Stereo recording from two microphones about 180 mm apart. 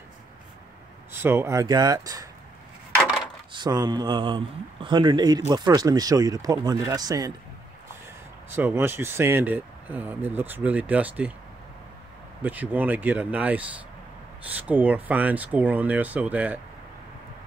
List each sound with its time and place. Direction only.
1.1 s speech: 15° right (ahead or behind)
3.5 s speech: 25° right (ahead or behind)
8.5 s speech: 10° right (ahead or behind)
12.4 s speech: 10° right (ahead or behind)